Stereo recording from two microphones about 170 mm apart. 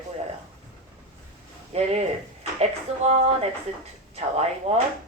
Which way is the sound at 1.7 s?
40° right (ahead or behind).